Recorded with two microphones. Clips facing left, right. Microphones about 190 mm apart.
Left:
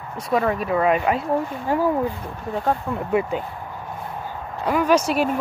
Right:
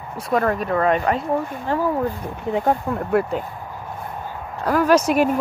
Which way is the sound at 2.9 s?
Centre (ahead or behind).